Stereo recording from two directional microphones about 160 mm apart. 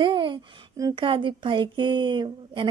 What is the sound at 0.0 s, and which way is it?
A woman's voice, 30° right (ahead or behind).